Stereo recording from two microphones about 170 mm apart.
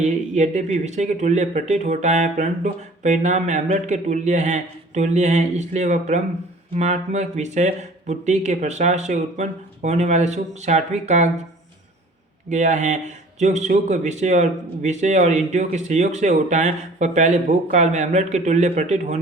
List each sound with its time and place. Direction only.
0.0 s speech: 45° right (ahead or behind)
12.5 s speech: 45° right (ahead or behind)